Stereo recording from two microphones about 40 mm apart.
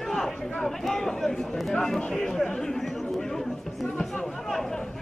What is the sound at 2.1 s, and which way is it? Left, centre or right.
Chatter, centre.